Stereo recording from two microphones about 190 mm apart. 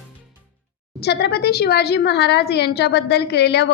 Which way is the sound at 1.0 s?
60° left (ahead or behind).